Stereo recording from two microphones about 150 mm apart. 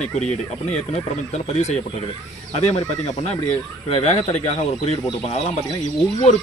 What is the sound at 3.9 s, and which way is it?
Speech, 45° left (ahead or behind).